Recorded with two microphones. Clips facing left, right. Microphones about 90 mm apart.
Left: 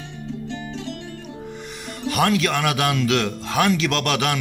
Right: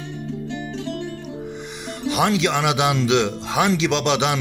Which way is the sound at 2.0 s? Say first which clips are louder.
Even; 20° right (ahead or behind).